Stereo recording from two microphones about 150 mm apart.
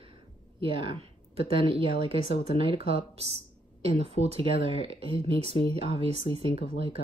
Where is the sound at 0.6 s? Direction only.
35° right (ahead or behind).